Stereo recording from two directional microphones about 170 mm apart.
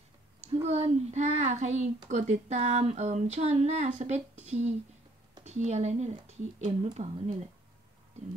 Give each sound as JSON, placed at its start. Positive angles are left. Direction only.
{"t": 0.5, "sound": "speech", "side_deg": -35}